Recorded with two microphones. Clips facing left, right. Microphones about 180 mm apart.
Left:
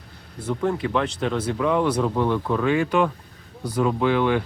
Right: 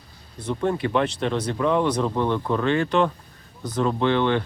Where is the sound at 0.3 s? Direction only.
5° left (ahead or behind).